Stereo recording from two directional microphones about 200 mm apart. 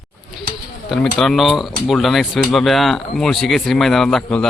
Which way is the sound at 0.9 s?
Centre (ahead or behind).